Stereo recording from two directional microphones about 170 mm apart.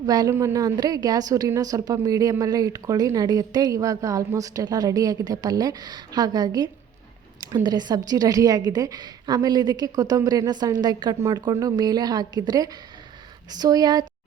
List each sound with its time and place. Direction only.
0.0 s a woman's voice: 20° right (ahead or behind)